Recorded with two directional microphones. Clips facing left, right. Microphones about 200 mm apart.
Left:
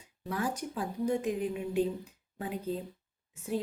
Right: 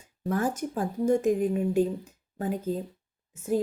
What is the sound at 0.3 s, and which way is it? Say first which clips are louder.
A woman's voice: right 6 dB; 50° right (ahead or behind).